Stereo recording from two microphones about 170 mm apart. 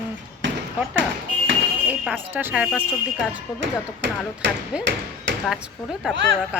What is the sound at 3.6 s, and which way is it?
Speech, 90° right.